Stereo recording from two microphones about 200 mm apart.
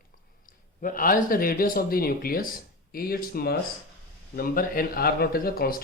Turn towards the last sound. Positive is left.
turn(degrees=50)  # may be behind; listen again after turning